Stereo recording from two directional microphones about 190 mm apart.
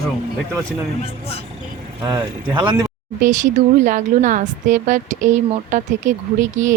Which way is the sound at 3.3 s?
40° right (ahead or behind).